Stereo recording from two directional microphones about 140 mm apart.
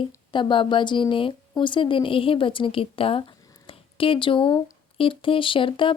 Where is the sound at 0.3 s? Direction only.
35° left (ahead or behind).